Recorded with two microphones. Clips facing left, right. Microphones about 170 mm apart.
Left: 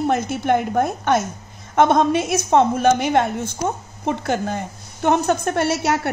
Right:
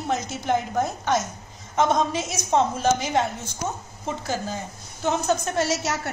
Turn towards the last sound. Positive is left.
turn(degrees=60)  # may be behind; listen again after turning